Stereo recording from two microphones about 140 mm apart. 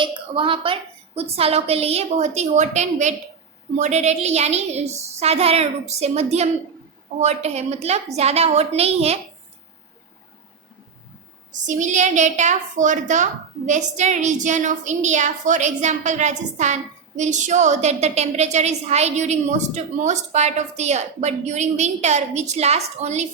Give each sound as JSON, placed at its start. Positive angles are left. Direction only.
{"t": 0.0, "sound": "a woman's voice", "side_deg": -35}
{"t": 11.6, "sound": "a woman's voice", "side_deg": -60}